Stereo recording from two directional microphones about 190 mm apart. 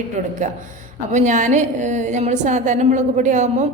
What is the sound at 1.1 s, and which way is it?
A woman's voice, 40° right (ahead or behind).